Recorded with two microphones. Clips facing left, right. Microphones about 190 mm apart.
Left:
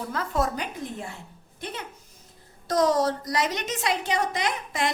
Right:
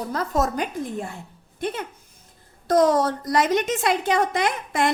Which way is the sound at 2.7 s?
55° right (ahead or behind).